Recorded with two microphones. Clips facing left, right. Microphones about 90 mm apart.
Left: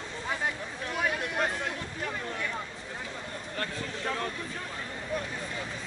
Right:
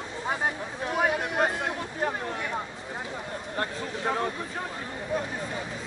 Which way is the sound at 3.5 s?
25° right (ahead or behind).